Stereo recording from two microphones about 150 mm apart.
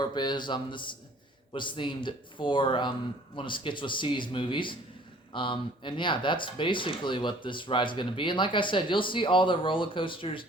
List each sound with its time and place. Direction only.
0.0 s speech: 30° left (ahead or behind)